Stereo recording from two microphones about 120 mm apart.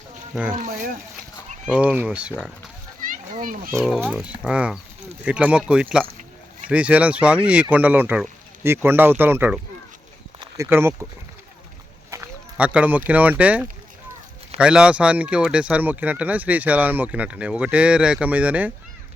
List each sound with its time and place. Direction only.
1.6 s speech: 10° right (ahead or behind)
3.0 s a sound: 90° right
3.8 s speech: centre (ahead or behind)
4.1 s speech: 10° right (ahead or behind)
10.6 s speech: 20° right (ahead or behind)
12.1 s a sound: 25° right (ahead or behind)
12.5 s speech: 10° right (ahead or behind)